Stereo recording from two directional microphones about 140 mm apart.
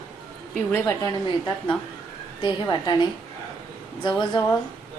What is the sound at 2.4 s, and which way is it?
Speech, 30° left (ahead or behind).